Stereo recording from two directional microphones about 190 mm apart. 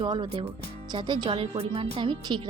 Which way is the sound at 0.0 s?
25° right (ahead or behind).